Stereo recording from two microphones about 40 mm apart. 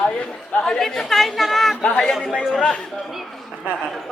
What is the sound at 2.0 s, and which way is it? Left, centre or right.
Chatter, centre.